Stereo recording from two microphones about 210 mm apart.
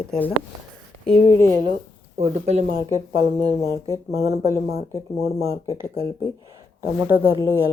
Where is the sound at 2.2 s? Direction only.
35° right (ahead or behind).